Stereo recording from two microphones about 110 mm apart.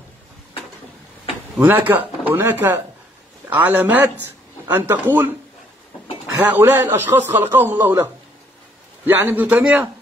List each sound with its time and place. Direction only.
1.6 s a man's voice: 15° right (ahead or behind)
6.4 s a man's voice: 20° right (ahead or behind)